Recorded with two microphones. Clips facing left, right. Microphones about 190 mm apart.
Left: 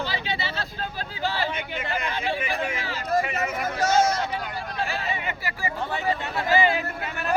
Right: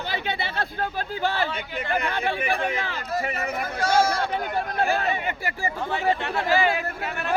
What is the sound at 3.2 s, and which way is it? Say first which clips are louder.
Speech: left 1 dB; 35° right (ahead or behind).